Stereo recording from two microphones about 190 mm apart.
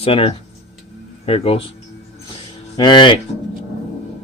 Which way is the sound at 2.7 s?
25° left (ahead or behind).